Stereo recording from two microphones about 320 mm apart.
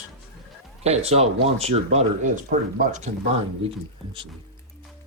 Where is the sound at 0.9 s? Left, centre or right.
Centre.